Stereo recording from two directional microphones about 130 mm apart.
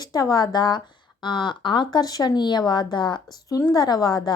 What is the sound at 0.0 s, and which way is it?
A woman's voice, 30° left (ahead or behind).